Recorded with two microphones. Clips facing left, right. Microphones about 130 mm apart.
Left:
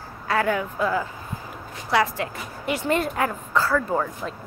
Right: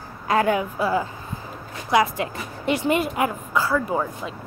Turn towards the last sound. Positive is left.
turn(degrees=-10)  # may be behind; listen again after turning